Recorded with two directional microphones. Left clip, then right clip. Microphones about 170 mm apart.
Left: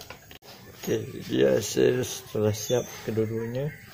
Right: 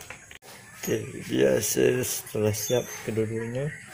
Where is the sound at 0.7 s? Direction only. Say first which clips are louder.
Even; 10° right (ahead or behind).